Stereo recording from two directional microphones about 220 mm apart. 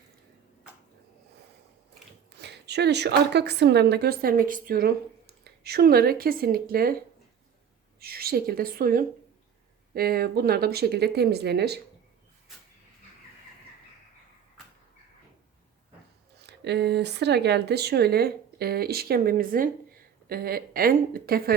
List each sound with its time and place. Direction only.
2.4 s a woman's voice: 50° right (ahead or behind)
7.9 s a woman's voice: 45° right (ahead or behind)
16.4 s a woman's voice: 50° right (ahead or behind)